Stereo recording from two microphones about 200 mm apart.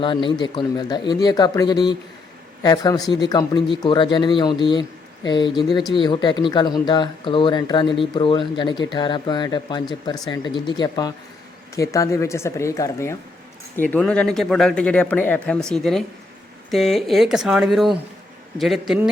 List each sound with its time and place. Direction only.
0.0 s speech: 25° left (ahead or behind); by 19.1 s centre (ahead or behind)